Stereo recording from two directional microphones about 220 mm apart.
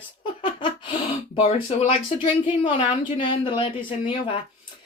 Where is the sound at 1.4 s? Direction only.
30° left (ahead or behind).